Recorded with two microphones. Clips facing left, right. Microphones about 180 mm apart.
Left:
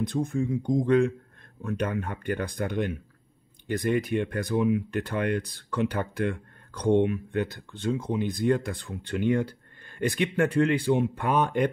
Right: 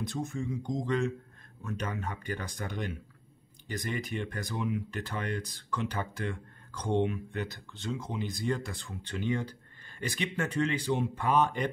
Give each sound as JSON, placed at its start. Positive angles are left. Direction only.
{"t": 0.0, "sound": "speech", "side_deg": 55}